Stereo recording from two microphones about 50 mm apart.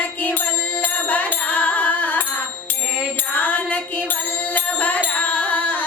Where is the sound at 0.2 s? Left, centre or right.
Left.